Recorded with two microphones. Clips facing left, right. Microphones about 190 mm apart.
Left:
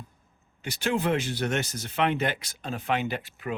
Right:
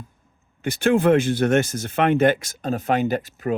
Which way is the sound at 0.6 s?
50° right (ahead or behind).